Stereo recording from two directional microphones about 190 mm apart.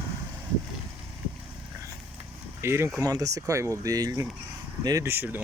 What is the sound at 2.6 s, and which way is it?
Speech, 15° right (ahead or behind).